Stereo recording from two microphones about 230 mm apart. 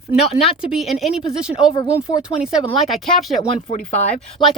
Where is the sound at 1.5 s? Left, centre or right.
Left.